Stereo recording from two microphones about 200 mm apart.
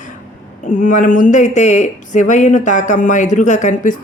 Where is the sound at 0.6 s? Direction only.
40° left (ahead or behind).